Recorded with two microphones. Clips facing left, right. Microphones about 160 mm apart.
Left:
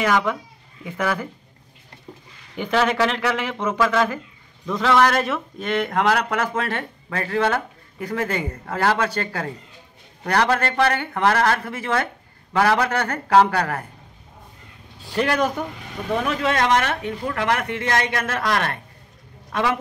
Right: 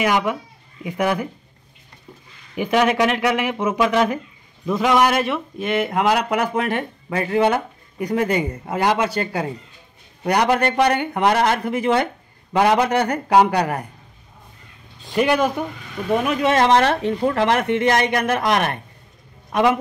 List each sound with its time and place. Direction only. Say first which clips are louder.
0.0 s speech: right 1 dB; 10° right (ahead or behind)
2.5 s speech: right 3 dB; 10° right (ahead or behind)
15.1 s speech: right 3 dB; 10° right (ahead or behind)
16.2 s speech: right 4 dB; 15° right (ahead or behind)